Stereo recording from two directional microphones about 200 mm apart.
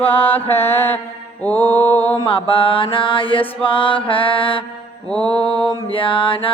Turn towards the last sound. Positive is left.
turn(degrees=25)  # may be behind; listen again after turning